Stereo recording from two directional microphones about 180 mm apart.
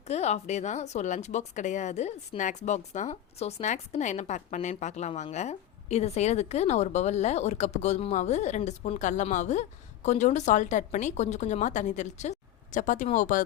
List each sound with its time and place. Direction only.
0.1 s speech: 40° left (ahead or behind)